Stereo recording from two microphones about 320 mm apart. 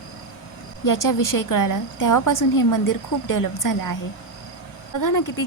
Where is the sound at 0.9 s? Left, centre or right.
Left.